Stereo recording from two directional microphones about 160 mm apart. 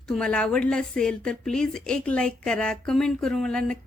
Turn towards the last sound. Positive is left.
turn(degrees=5)  # may be behind; listen again after turning